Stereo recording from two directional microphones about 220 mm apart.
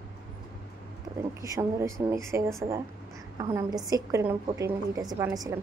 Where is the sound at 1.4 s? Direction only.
15° right (ahead or behind).